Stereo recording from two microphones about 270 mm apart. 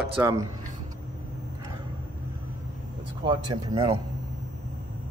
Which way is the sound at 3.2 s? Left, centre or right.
Centre.